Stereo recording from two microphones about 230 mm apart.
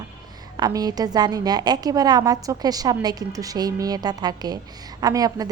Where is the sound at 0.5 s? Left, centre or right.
Centre.